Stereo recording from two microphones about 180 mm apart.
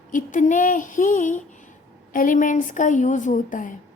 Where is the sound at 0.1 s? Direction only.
45° left (ahead or behind).